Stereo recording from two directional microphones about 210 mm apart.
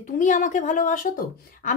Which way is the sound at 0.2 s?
35° left (ahead or behind).